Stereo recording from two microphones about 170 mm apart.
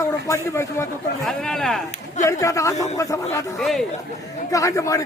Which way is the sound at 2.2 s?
20° left (ahead or behind).